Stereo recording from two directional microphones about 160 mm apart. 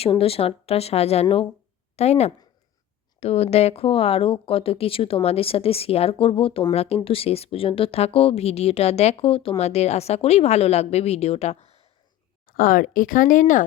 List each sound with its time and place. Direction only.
0.0 s speech: 35° left (ahead or behind)
12.5 s speech: 60° left (ahead or behind)